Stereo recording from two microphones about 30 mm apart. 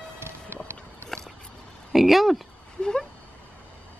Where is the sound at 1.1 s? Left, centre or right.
Centre.